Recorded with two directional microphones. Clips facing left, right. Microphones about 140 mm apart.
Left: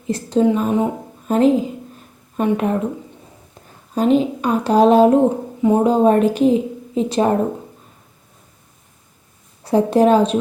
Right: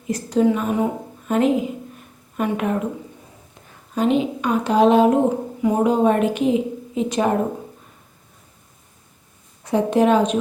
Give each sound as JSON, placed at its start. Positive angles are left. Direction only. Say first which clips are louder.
{"t": 0.1, "sound": "a woman's voice", "louder": "left 2 dB", "side_deg": 30}
{"t": 3.9, "sound": "a woman's voice", "louder": "left 3 dB", "side_deg": 40}
{"t": 9.6, "sound": "a woman's voice", "louder": "left 3 dB", "side_deg": 35}